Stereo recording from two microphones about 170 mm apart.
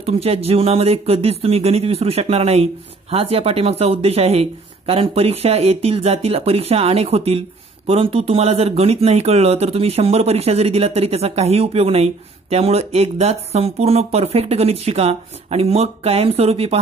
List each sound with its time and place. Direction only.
0.0 s speech: 35° right (ahead or behind)